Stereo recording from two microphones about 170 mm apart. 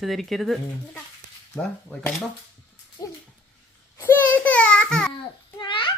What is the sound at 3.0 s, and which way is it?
Babbling, 20° left (ahead or behind).